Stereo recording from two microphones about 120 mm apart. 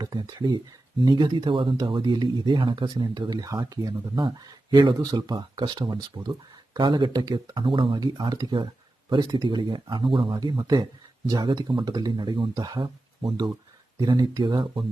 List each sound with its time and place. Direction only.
0.0 s speech: 35° right (ahead or behind)
8.0 s speech: 35° right (ahead or behind)